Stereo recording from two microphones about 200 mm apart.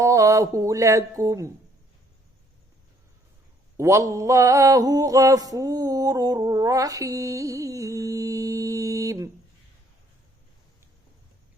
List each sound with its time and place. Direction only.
0.0 s mantra: 15° right (ahead or behind)
3.8 s mantra: 15° right (ahead or behind)